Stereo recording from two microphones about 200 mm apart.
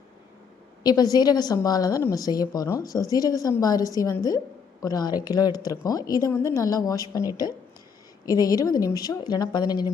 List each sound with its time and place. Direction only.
0.8 s a woman's voice: 20° left (ahead or behind)